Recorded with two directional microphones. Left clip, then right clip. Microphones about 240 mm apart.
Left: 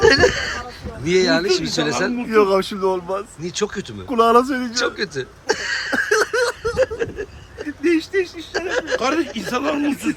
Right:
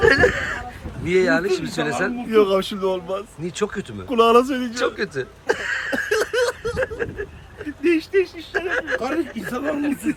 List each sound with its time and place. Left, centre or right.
0.0 s a sound: centre
1.0 s speech: centre
9.0 s speech: left